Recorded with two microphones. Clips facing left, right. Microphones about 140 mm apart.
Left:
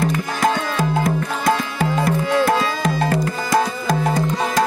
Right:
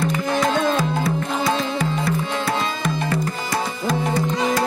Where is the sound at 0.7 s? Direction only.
50° left (ahead or behind).